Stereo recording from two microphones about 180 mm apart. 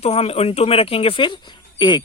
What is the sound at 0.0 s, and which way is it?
Speech, 35° left (ahead or behind).